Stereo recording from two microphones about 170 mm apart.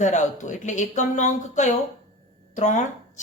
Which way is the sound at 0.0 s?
45° left (ahead or behind).